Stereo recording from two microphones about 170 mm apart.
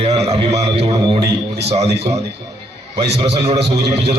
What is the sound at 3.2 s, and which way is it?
Speech, 30° right (ahead or behind).